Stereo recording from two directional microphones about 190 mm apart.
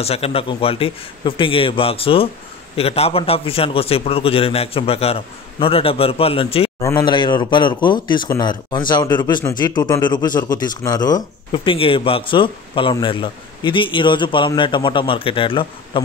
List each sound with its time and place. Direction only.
0.0 s a man's voice: 30° left (ahead or behind)
6.8 s a man's voice: 20° left (ahead or behind)